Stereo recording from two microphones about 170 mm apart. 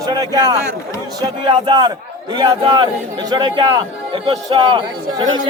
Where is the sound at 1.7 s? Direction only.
25° right (ahead or behind).